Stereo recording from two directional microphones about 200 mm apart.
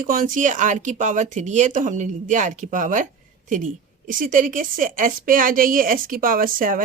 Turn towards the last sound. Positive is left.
turn(degrees=-45)  # may be behind; listen again after turning